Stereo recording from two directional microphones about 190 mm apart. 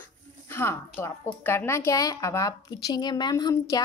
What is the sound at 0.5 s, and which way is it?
A woman's voice, 10° left (ahead or behind).